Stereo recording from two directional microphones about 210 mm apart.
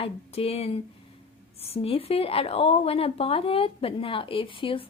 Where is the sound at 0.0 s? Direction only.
30° left (ahead or behind).